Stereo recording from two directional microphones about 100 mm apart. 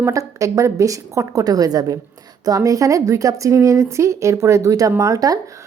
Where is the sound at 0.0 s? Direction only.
35° right (ahead or behind).